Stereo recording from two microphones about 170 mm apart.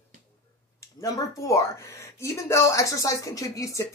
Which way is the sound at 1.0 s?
20° left (ahead or behind).